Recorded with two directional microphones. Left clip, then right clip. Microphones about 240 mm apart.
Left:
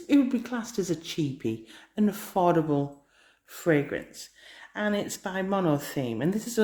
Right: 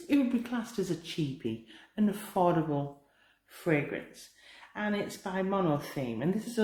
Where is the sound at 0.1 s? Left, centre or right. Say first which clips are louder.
Left 5 dB; left.